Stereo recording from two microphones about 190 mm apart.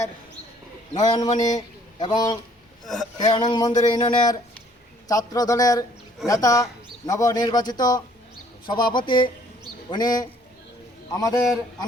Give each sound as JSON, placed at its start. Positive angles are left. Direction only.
{"t": 0.9, "sound": "a man's voice", "side_deg": 20}
{"t": 2.8, "sound": "speech", "side_deg": 0}
{"t": 3.4, "sound": "a man's voice", "side_deg": 20}